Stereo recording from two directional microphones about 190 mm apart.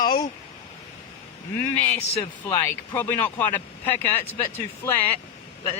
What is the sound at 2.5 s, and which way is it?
Speech, 10° left (ahead or behind).